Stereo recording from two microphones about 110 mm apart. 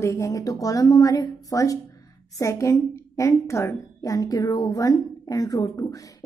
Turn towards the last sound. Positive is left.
turn(degrees=30)  # may be behind; listen again after turning